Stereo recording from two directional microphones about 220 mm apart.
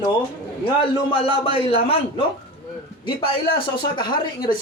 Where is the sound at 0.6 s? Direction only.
25° left (ahead or behind).